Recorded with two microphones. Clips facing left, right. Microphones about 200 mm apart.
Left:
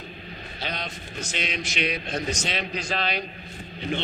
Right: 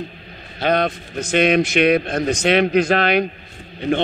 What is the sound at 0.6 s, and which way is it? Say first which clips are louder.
A man's voice: right 16 dB; 55° right (ahead or behind).